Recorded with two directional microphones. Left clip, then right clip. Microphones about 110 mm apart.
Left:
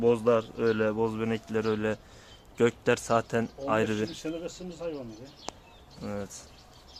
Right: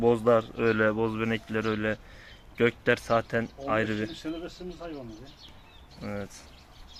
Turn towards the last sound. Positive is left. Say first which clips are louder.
# even
turn(degrees=5)  # may be behind; listen again after turning